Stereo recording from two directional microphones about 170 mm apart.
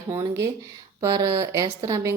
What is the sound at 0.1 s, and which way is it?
A woman's voice, 20° right (ahead or behind).